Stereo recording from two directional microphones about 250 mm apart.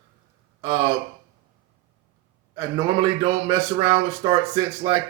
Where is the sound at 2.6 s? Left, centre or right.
Centre.